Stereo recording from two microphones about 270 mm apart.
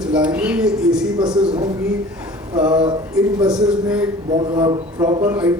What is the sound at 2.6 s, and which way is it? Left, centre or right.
Speech, centre.